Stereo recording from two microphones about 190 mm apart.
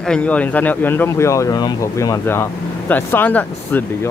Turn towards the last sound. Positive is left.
turn(degrees=10)  # may be behind; listen again after turning